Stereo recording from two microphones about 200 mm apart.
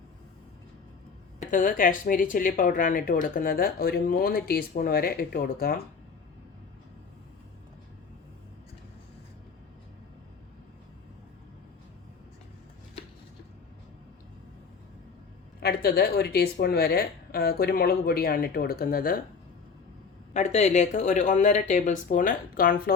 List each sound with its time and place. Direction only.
1.4 s a woman's voice: 40° left (ahead or behind)
15.6 s a woman's voice: 50° left (ahead or behind)
20.3 s speech: 35° left (ahead or behind)